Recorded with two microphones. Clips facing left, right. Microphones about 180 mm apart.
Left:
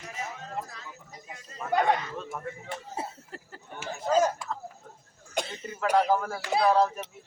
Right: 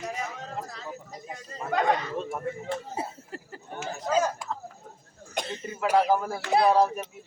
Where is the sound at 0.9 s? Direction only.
45° right (ahead or behind).